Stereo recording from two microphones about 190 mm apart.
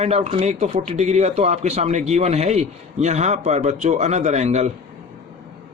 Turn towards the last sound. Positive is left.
turn(degrees=-35)  # may be behind; listen again after turning